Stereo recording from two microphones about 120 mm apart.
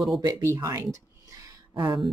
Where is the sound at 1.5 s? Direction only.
40° right (ahead or behind).